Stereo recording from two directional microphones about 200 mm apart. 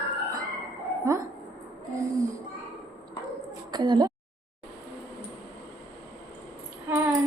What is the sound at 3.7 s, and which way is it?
Speech, 20° right (ahead or behind).